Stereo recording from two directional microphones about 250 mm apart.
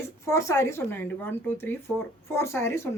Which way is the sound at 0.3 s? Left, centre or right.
Centre.